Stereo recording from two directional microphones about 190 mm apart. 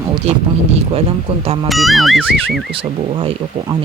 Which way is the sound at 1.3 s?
30° right (ahead or behind).